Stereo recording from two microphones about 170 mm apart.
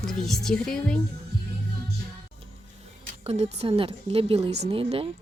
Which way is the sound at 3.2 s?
40° right (ahead or behind).